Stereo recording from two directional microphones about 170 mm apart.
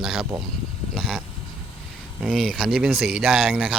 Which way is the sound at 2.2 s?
Centre (ahead or behind).